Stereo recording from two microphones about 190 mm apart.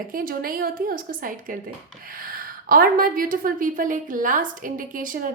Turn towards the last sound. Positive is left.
turn(degrees=-45)  # may be behind; listen again after turning